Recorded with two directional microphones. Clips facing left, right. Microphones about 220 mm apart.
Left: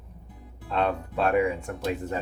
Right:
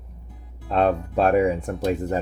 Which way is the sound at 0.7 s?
40° right (ahead or behind).